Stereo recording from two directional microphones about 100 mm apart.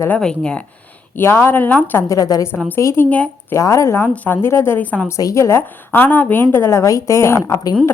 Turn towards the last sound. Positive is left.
turn(degrees=35)  # may be behind; listen again after turning